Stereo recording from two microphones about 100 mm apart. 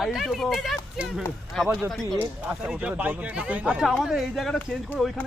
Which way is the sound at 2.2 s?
20° right (ahead or behind).